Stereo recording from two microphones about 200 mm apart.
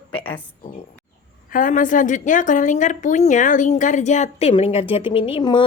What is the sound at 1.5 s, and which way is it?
A woman's voice, 40° left (ahead or behind).